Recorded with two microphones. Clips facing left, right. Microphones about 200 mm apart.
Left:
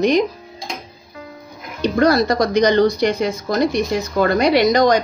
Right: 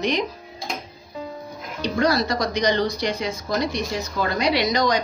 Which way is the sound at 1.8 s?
50° left (ahead or behind).